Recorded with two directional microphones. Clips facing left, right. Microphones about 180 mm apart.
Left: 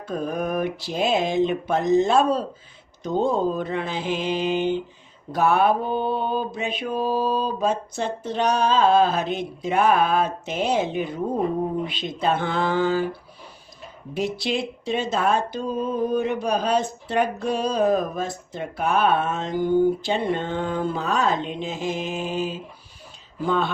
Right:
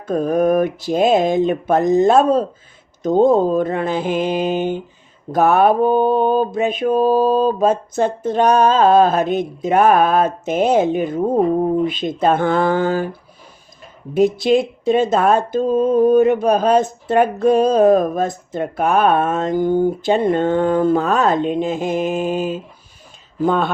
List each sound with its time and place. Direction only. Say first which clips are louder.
0.0 s speech: right 10 dB; 50° right (ahead or behind)
14.1 s speech: right 11 dB; 50° right (ahead or behind)